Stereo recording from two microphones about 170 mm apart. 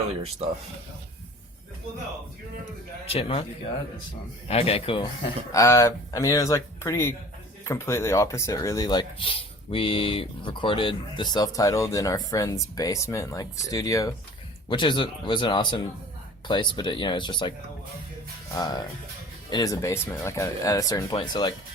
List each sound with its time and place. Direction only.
3.1 s speech: 35° left (ahead or behind)
4.4 s speech: 35° left (ahead or behind)
5.5 s speech: 20° left (ahead or behind)
18.5 s speech: 20° left (ahead or behind)